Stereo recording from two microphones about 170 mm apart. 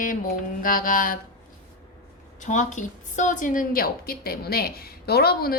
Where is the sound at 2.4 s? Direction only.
45° left (ahead or behind); by 5.6 s 65° left (ahead or behind).